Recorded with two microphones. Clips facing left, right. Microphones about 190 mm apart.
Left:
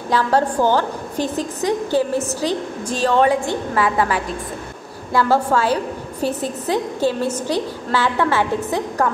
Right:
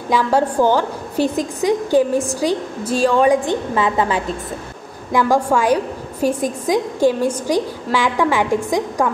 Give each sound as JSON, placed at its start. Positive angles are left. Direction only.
{"t": 0.1, "sound": "a woman's voice", "side_deg": -10}